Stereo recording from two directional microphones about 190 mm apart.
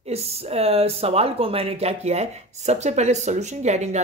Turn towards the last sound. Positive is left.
turn(degrees=-35)  # may be behind; listen again after turning